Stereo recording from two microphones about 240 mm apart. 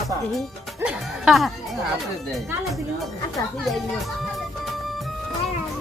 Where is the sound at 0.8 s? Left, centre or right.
Centre.